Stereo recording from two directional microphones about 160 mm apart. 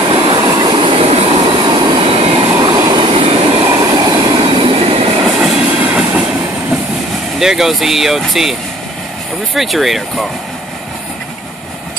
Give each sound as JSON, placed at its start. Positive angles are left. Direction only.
{"t": 0.1, "sound": "train", "side_deg": -30}
{"t": 1.5, "sound": "vehicle", "side_deg": -30}
{"t": 2.6, "sound": "train", "side_deg": -30}
{"t": 3.6, "sound": "train", "side_deg": -20}
{"t": 5.4, "sound": "train", "side_deg": -5}
{"t": 7.3, "sound": "speech", "side_deg": 0}